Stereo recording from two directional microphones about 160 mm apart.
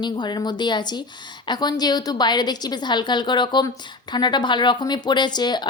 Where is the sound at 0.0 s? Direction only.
25° left (ahead or behind).